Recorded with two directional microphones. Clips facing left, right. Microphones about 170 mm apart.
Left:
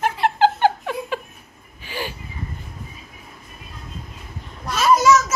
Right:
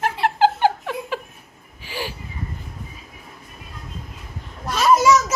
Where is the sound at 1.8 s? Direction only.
10° right (ahead or behind).